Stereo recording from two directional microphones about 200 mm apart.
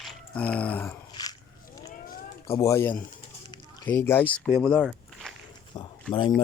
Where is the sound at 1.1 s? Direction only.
20° left (ahead or behind).